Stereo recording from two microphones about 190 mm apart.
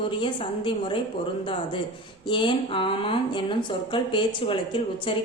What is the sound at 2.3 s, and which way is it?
A woman's voice, 25° left (ahead or behind).